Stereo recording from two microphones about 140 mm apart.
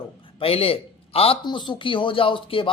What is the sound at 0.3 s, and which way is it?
A man's voice, 45° left (ahead or behind).